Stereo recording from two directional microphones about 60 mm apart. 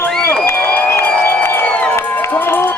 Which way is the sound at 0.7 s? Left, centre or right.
Left.